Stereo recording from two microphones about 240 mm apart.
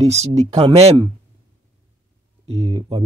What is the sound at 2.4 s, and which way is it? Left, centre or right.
Speech, right.